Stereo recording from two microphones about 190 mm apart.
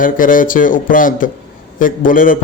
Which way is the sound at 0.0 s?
45° left (ahead or behind).